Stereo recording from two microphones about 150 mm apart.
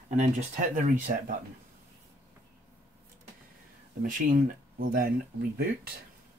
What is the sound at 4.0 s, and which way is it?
Speech, 65° right (ahead or behind).